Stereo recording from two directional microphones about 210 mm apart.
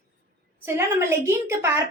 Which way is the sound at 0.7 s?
10° right (ahead or behind).